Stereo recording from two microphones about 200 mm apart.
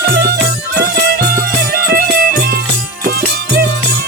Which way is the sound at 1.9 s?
50° right (ahead or behind).